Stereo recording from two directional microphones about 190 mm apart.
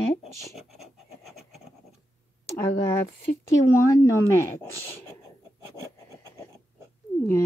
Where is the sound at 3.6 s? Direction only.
15° left (ahead or behind).